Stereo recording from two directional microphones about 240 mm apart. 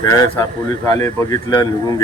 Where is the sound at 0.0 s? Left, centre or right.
Centre.